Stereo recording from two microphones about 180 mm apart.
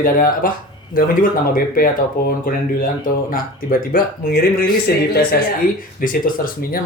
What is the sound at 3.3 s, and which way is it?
Speech, 55° left (ahead or behind).